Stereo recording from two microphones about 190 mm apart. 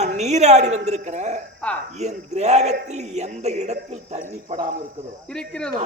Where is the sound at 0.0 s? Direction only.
35° right (ahead or behind).